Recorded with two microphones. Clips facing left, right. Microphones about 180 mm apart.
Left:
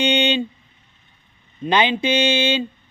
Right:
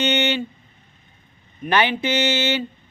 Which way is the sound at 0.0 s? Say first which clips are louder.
Left 2 dB; 15° left (ahead or behind).